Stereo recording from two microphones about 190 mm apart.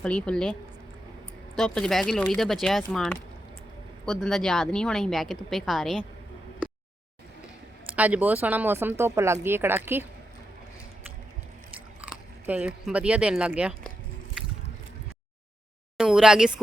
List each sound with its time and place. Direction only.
0.0 s speech: 5° left (ahead or behind)
1.5 s speech: centre (ahead or behind)
7.9 s speech: 10° right (ahead or behind)
12.0 s speech: 5° right (ahead or behind)
16.0 s speech: 5° right (ahead or behind)